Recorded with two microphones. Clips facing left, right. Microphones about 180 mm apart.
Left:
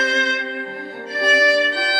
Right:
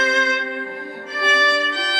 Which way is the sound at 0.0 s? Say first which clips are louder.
Right 1 dB; 35° left (ahead or behind).